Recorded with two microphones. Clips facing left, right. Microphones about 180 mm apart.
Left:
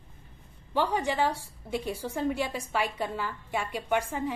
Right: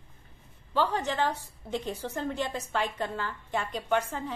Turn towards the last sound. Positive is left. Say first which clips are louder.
# even
turn(degrees=10)  # may be behind; listen again after turning